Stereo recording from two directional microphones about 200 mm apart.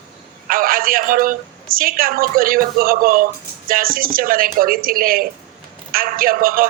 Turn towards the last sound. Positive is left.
turn(degrees=-45)  # may be behind; listen again after turning